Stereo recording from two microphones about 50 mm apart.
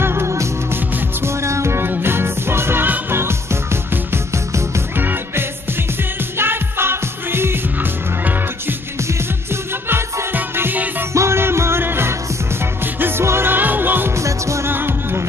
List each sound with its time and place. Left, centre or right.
0.0 s music: right
1.9 s music: right
4.9 s music: right
9.5 s music: right
10.3 s music: right
11.1 s music: right
13.2 s music: right
14.1 s music: right
14.7 s music: right